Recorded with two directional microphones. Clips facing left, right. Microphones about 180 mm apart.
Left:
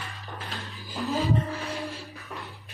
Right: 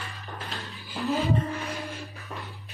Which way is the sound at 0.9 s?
40° left (ahead or behind).